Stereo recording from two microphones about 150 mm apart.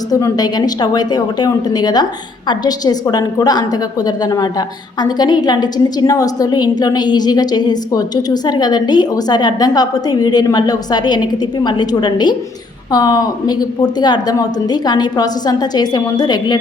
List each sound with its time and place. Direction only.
0.1 s a woman's voice: 25° left (ahead or behind)